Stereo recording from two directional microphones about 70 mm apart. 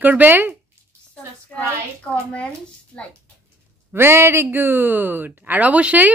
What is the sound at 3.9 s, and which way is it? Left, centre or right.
Speech, right.